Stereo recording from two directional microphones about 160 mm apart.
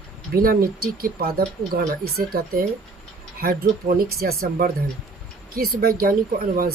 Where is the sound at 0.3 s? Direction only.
65° right (ahead or behind).